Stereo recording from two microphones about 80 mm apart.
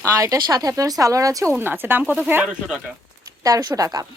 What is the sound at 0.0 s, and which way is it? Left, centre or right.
Speech, right.